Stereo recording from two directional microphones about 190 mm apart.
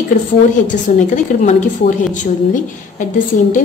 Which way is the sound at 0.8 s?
40° left (ahead or behind).